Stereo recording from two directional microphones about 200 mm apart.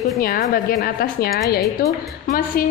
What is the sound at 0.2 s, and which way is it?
A woman's voice, 45° left (ahead or behind).